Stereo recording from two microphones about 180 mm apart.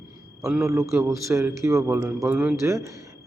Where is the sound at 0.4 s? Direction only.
5° right (ahead or behind).